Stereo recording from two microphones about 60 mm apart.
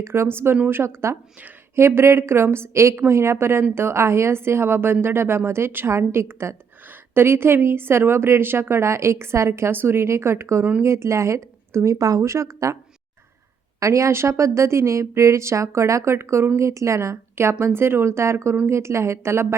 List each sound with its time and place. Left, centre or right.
0.0 s a woman's voice: right
0.9 s a woman's voice: right
11.9 s speech: right
13.7 s a woman's voice: right